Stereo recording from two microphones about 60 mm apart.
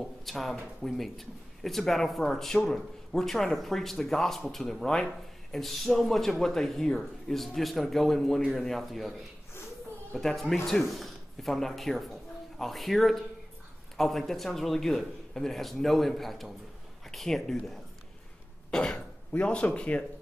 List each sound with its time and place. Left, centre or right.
0.0 s speech: centre
10.1 s speech: centre
18.7 s cough: centre
19.3 s speech: left